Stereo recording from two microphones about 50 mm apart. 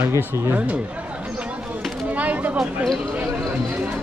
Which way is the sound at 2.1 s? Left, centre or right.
Right.